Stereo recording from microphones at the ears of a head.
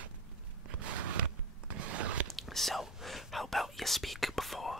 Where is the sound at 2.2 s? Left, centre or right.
Centre.